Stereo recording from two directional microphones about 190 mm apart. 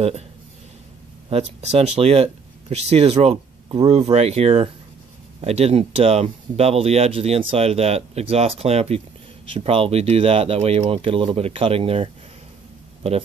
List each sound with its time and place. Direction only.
1.6 s speech: 35° right (ahead or behind)